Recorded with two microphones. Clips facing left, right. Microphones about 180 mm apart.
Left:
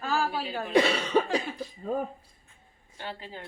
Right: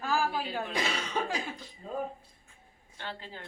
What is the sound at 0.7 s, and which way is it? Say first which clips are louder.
Speech: left 12 dB; 70° left (ahead or behind).